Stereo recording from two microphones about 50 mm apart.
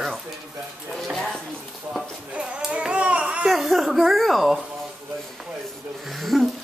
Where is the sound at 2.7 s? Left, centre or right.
Right.